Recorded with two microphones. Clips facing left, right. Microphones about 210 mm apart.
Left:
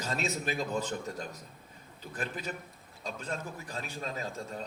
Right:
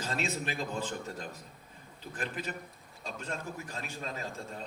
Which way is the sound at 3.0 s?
35° left (ahead or behind).